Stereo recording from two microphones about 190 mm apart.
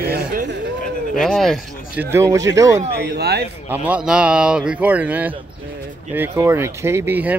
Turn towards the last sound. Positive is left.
turn(degrees=-10)  # may be behind; listen again after turning